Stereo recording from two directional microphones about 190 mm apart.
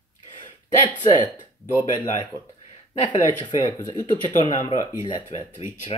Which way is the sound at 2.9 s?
25° left (ahead or behind).